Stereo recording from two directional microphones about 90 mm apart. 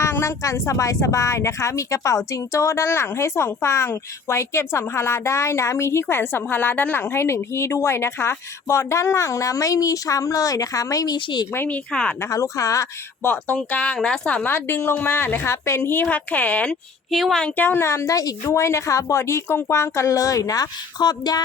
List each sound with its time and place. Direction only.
0.0 s speech: 30° left (ahead or behind); by 11.4 s 50° left (ahead or behind)
11.5 s a woman's voice: 25° left (ahead or behind)
11.9 s speech: 10° left (ahead or behind)
12.2 s speech: 35° left (ahead or behind)
13.2 s speech: 15° left (ahead or behind)
14.5 s a woman's voice: 25° left (ahead or behind)
17.1 s speech: centre (ahead or behind)
17.6 s speech: 25° left (ahead or behind); by 21.4 s 50° left (ahead or behind)